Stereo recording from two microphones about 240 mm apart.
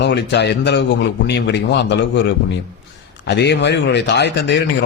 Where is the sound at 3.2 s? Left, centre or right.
Left.